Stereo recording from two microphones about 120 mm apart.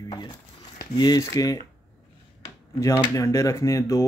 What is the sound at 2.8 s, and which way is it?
Speech, 25° left (ahead or behind).